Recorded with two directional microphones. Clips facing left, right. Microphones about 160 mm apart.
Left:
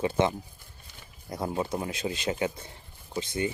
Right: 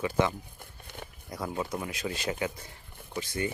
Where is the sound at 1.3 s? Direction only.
25° left (ahead or behind).